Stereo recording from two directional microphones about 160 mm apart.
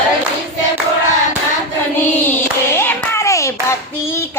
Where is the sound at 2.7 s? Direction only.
15° left (ahead or behind).